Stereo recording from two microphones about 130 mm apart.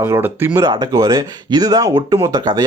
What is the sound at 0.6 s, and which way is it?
Speech, 30° right (ahead or behind).